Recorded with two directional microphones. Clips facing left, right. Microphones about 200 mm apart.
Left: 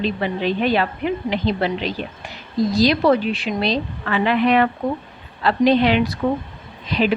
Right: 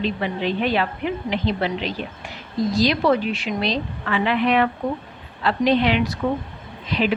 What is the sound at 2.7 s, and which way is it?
A woman's voice, 35° left (ahead or behind).